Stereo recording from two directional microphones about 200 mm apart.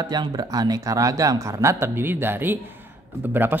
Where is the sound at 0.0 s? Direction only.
20° right (ahead or behind).